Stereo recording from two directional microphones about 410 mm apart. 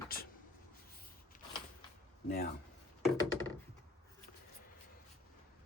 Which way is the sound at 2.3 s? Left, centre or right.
Left.